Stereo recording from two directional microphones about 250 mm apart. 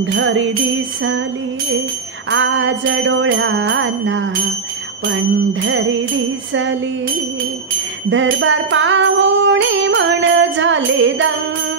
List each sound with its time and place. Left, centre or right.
0.0 s music: right
2.3 s music: right
5.5 s music: right
8.1 s music: right